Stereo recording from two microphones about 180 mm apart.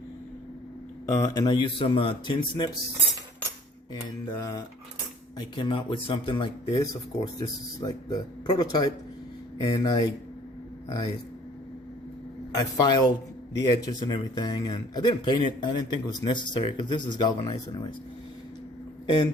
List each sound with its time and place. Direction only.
1.0 s speech: 20° left (ahead or behind)
4.4 s cutlery: 20° left (ahead or behind)
5.4 s speech: 30° left (ahead or behind)
12.5 s speech: 20° left (ahead or behind)
19.0 s speech: 25° left (ahead or behind)